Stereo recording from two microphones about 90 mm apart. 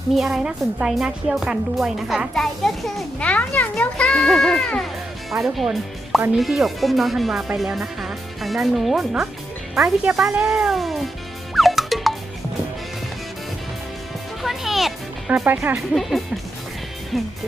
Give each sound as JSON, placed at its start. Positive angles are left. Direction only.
{"t": 0.1, "sound": "speech", "side_deg": 0}
{"t": 3.2, "sound": "a child's voice", "side_deg": 15}
{"t": 11.5, "sound": "music", "side_deg": 0}
{"t": 14.4, "sound": "music", "side_deg": -5}
{"t": 15.4, "sound": "speech", "side_deg": -20}
{"t": 16.0, "sound": "speech", "side_deg": 0}